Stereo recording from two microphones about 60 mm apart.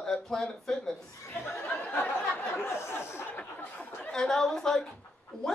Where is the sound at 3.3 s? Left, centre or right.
Left.